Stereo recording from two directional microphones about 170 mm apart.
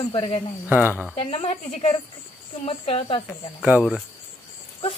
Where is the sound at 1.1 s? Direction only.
35° left (ahead or behind).